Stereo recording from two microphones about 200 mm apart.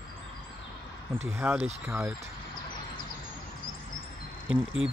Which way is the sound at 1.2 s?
10° right (ahead or behind).